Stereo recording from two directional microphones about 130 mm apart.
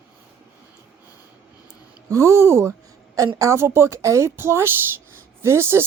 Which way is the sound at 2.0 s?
25° right (ahead or behind).